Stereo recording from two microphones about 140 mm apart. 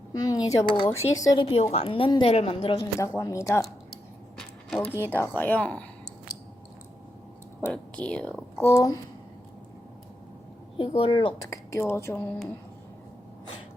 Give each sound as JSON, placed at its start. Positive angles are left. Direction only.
{"t": 0.1, "sound": "speech", "side_deg": 25}
{"t": 0.9, "sound": "speech", "side_deg": 20}
{"t": 1.4, "sound": "a woman's voice", "side_deg": 40}
{"t": 3.0, "sound": "speech", "side_deg": 20}
{"t": 4.8, "sound": "speech", "side_deg": 15}
{"t": 7.7, "sound": "speech", "side_deg": 10}
{"t": 8.5, "sound": "speech", "side_deg": 20}
{"t": 10.8, "sound": "a woman's voice", "side_deg": 40}
{"t": 11.4, "sound": "speech", "side_deg": 20}